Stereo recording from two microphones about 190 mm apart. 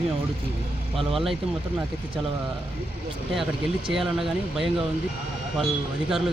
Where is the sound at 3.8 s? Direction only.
Centre (ahead or behind).